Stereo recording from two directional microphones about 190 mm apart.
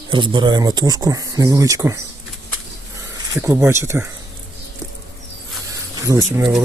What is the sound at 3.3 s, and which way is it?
Speech, 15° right (ahead or behind).